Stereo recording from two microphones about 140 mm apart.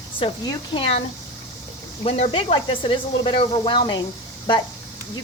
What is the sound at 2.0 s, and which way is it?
Speech, 45° left (ahead or behind).